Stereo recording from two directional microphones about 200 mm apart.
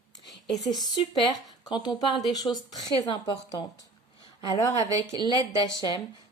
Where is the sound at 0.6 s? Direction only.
20° left (ahead or behind).